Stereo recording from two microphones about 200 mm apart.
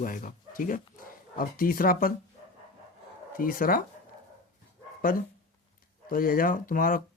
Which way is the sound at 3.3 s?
45° left (ahead or behind).